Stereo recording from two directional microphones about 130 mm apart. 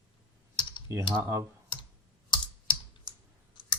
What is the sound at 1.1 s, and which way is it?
Speech, 15° right (ahead or behind).